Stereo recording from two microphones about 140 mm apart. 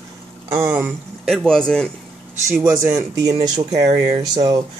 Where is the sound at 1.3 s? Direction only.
5° left (ahead or behind).